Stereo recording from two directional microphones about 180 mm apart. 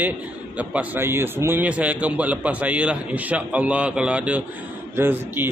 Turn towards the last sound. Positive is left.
turn(degrees=-10)  # may be behind; listen again after turning